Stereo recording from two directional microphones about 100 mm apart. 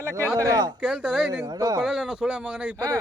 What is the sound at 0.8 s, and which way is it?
Speech, 5° right (ahead or behind).